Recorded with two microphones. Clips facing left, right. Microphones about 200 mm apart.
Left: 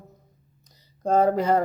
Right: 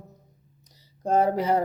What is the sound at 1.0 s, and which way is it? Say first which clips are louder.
Speech: left 2 dB; 15° right (ahead or behind).